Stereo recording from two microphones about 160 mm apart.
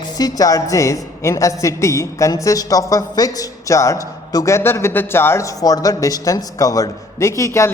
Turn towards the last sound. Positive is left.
turn(degrees=15)  # may be behind; listen again after turning